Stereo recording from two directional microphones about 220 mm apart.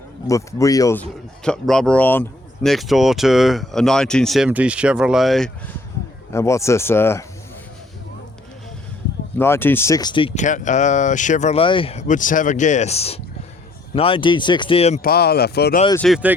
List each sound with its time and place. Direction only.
0.3 s speech: 15° left (ahead or behind)
1.5 s speech: centre (ahead or behind)
6.3 s speech: 15° left (ahead or behind)
9.4 s speech: 10° left (ahead or behind); by 15.0 s 30° left (ahead or behind)
15.0 s speech: 45° left (ahead or behind)
16.0 s speech: centre (ahead or behind)